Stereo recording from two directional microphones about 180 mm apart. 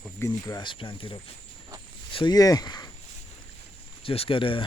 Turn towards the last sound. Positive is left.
turn(degrees=30)  # may be behind; listen again after turning